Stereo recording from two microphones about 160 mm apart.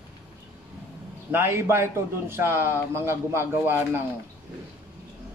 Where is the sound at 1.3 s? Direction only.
15° right (ahead or behind).